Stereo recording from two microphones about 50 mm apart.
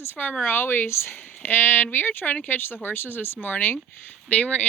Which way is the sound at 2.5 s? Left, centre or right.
Left.